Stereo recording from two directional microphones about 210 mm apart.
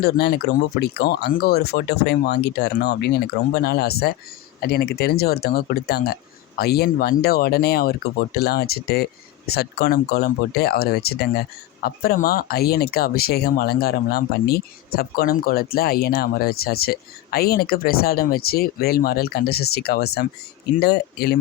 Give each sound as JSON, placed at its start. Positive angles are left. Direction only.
{"t": 0.0, "sound": "speech", "side_deg": 50}